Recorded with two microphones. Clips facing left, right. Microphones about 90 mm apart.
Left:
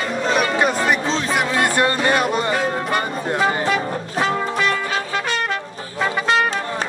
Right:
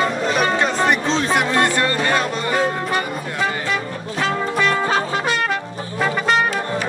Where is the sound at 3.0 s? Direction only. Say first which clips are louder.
Left 2 dB; 30° left (ahead or behind).